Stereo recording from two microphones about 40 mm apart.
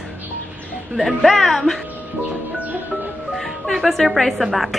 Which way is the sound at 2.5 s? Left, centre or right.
Right.